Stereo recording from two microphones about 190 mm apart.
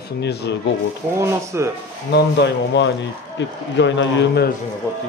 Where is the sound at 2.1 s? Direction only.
65° left (ahead or behind).